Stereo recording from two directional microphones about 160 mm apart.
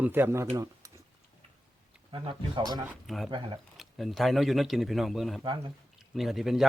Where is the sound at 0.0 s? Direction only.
10° right (ahead or behind).